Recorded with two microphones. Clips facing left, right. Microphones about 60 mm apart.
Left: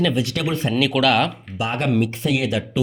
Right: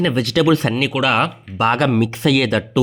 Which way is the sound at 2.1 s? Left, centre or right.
Right.